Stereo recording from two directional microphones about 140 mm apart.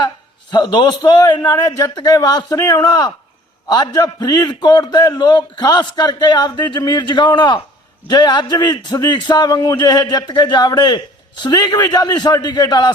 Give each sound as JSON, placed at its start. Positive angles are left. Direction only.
{"t": 0.5, "sound": "a man's voice", "side_deg": 30}